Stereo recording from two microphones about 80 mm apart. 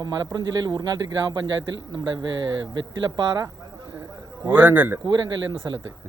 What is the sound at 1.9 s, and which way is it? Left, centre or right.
Speech, right.